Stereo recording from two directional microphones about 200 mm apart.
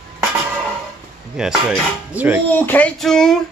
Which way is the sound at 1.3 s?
Centre (ahead or behind).